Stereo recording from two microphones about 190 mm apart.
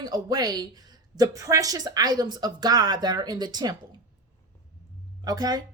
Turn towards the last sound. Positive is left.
turn(degrees=-20)  # may be behind; listen again after turning